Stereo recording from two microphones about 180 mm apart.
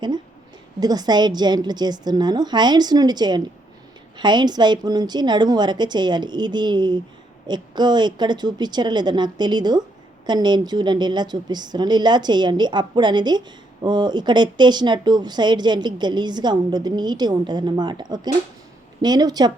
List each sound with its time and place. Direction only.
0.8 s speech: 20° right (ahead or behind)